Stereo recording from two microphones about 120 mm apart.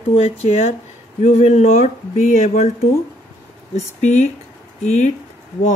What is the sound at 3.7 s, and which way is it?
Speech, 70° left (ahead or behind).